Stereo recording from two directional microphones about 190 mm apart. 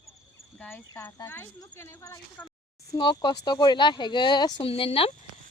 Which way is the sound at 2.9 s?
20° left (ahead or behind).